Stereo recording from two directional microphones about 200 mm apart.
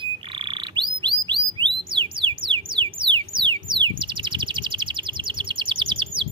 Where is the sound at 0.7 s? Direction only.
25° right (ahead or behind).